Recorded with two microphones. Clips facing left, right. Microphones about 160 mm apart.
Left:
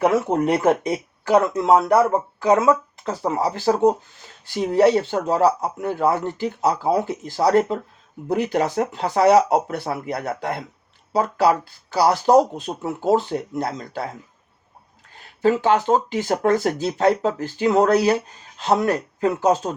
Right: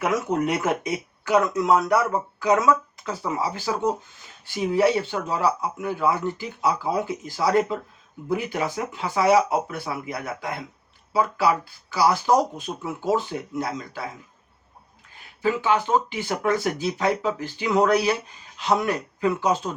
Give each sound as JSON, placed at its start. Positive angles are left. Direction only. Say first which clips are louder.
{"t": 0.0, "sound": "speech", "louder": "left 5 dB", "side_deg": 30}
{"t": 12.0, "sound": "speech", "louder": "left 4 dB", "side_deg": 30}
{"t": 12.6, "sound": "speech", "louder": "left 4 dB", "side_deg": 40}
{"t": 15.4, "sound": "speech", "louder": "left 5 dB", "side_deg": 40}